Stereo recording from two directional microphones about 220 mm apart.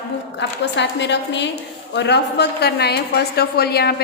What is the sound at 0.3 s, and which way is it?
A woman's voice, 55° left (ahead or behind).